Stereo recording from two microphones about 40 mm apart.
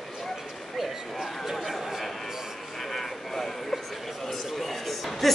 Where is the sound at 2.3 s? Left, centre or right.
Centre.